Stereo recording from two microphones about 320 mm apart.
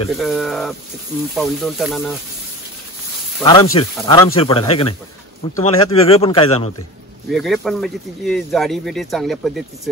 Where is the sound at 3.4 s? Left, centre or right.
Centre.